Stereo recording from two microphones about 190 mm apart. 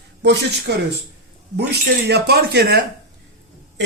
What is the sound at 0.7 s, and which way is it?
Speech, 60° right (ahead or behind).